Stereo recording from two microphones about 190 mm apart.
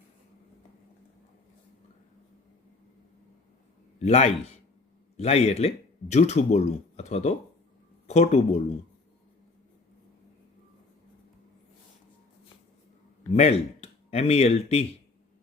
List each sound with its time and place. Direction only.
4.0 s speech: 35° left (ahead or behind)
13.3 s speech: 35° left (ahead or behind)